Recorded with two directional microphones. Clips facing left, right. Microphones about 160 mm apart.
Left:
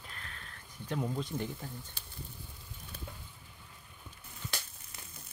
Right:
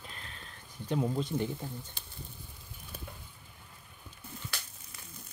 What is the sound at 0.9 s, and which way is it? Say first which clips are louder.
Speech: right 4 dB; 20° right (ahead or behind).